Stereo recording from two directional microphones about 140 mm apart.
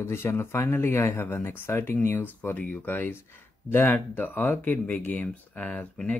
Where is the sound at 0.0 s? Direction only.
20° left (ahead or behind).